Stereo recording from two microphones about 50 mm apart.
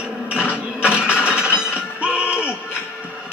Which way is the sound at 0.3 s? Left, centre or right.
Right.